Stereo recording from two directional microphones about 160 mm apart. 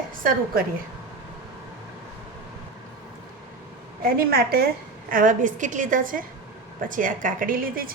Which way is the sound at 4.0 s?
70° right (ahead or behind).